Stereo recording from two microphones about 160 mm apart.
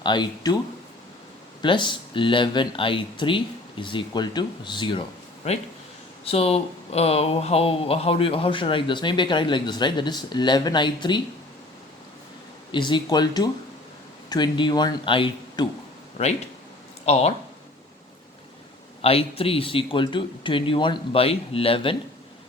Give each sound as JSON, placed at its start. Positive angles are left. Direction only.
{"t": 0.0, "sound": "speech", "side_deg": 30}
{"t": 1.6, "sound": "speech", "side_deg": 30}
{"t": 5.5, "sound": "speech", "side_deg": 40}
{"t": 12.7, "sound": "speech", "side_deg": 30}
{"t": 17.1, "sound": "speech", "side_deg": 40}
{"t": 19.0, "sound": "speech", "side_deg": 35}